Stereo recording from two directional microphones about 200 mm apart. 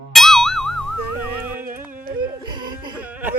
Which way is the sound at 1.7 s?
10° right (ahead or behind).